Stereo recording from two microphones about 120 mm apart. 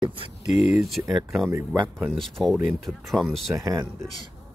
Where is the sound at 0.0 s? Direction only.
45° right (ahead or behind).